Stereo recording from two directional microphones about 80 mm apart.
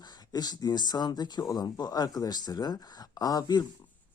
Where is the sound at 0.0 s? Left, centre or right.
Left.